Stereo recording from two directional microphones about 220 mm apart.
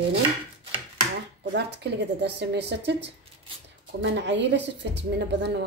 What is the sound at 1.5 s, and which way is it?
A woman's voice, 50° right (ahead or behind).